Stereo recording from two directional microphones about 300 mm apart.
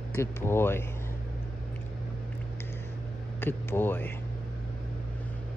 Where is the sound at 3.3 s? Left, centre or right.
Centre.